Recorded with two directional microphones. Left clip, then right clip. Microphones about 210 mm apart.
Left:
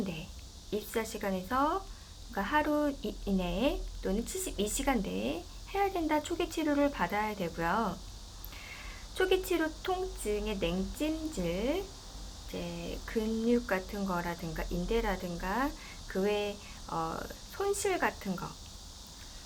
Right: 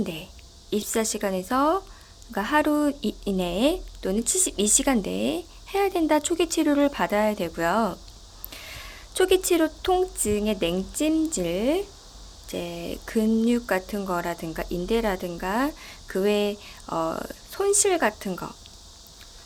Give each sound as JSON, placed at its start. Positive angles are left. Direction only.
{"t": 0.7, "sound": "speech", "side_deg": -50}